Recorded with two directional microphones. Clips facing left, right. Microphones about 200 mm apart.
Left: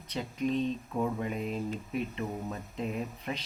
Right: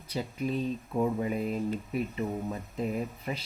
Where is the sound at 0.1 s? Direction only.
5° right (ahead or behind).